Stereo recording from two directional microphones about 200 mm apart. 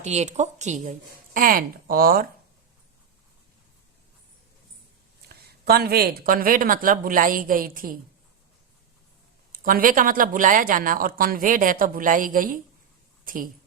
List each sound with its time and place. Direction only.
0.0 s speech: 35° right (ahead or behind)
5.3 s speech: 50° right (ahead or behind)
9.5 s a woman's voice: 45° right (ahead or behind)